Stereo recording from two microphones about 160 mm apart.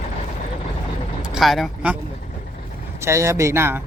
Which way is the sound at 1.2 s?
Centre (ahead or behind).